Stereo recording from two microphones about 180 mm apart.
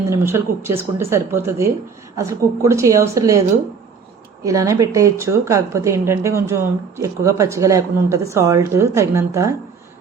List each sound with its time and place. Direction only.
0.1 s a woman's voice: 15° right (ahead or behind)
4.4 s a woman's voice: 15° right (ahead or behind)